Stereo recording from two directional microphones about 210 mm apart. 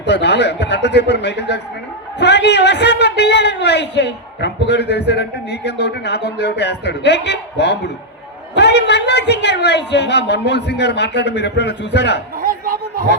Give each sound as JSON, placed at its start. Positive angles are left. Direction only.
{"t": 0.0, "sound": "a man's voice", "side_deg": 55}
{"t": 12.4, "sound": "chopping", "side_deg": -45}